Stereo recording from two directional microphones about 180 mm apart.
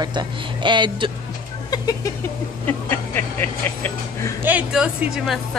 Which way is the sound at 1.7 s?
20° left (ahead or behind).